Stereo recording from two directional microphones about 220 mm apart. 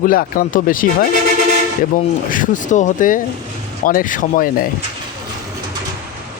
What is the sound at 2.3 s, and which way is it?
Speech, 35° left (ahead or behind).